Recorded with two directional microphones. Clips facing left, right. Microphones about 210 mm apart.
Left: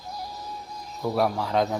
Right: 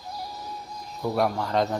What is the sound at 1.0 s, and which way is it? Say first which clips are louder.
Speech: even; centre (ahead or behind).